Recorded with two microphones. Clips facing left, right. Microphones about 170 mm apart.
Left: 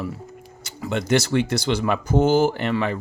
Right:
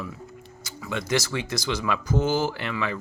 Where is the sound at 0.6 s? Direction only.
60° left (ahead or behind).